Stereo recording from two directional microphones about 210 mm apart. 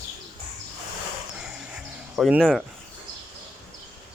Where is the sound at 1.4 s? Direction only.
5° right (ahead or behind).